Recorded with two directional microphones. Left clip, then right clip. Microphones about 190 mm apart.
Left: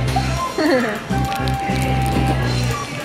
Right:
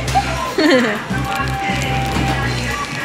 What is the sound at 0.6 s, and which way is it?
Music, 20° right (ahead or behind).